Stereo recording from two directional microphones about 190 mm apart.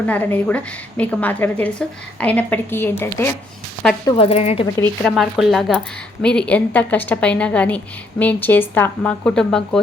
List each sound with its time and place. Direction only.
0.0 s a woman's voice: 10° left (ahead or behind)
4.2 s a woman's voice: 30° left (ahead or behind)
4.8 s a woman's voice: centre (ahead or behind)